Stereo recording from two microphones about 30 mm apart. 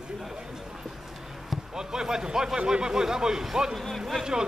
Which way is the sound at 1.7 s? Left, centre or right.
Centre.